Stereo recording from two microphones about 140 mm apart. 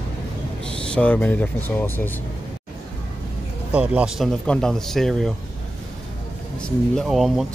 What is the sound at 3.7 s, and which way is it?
Speech, 10° right (ahead or behind).